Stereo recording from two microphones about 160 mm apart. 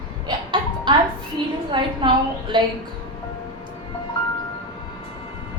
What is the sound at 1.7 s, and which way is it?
Speech, 30° right (ahead or behind).